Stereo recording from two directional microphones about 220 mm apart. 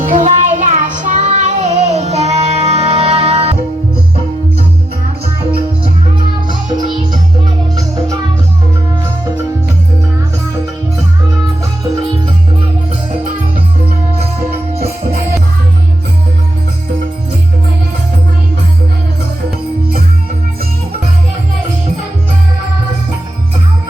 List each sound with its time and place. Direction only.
0.0 s child singing: 35° right (ahead or behind)